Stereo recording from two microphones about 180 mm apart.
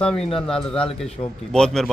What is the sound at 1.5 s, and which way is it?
Speech, 5° left (ahead or behind).